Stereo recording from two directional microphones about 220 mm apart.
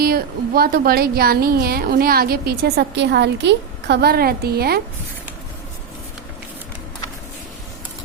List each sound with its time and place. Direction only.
0.0 s speech: 45° right (ahead or behind)